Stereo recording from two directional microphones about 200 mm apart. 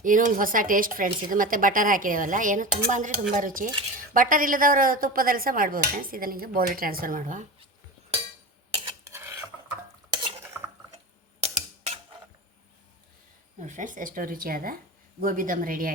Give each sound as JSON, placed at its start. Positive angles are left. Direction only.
{"t": 0.0, "sound": "speech", "side_deg": -40}
{"t": 8.8, "sound": "scissors", "side_deg": -15}
{"t": 10.1, "sound": "stir", "side_deg": -20}
{"t": 11.4, "sound": "a sound", "side_deg": -35}
{"t": 13.6, "sound": "speech", "side_deg": -40}